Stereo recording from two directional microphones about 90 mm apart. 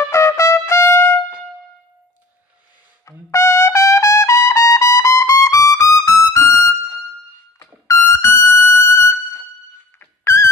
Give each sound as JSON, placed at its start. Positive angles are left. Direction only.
{"t": 0.0, "sound": "trumpet", "side_deg": 30}
{"t": 3.1, "sound": "trumpet", "side_deg": 35}
{"t": 7.5, "sound": "a sound", "side_deg": 35}
{"t": 9.9, "sound": "trumpet", "side_deg": 30}